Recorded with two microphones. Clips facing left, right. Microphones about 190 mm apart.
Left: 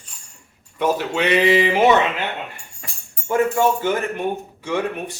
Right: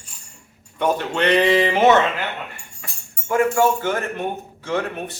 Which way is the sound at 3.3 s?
20° left (ahead or behind).